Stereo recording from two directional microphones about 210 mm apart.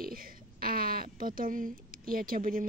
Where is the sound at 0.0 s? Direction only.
45° right (ahead or behind).